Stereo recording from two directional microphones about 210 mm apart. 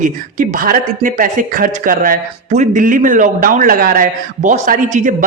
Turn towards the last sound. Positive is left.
turn(degrees=-40)  # may be behind; listen again after turning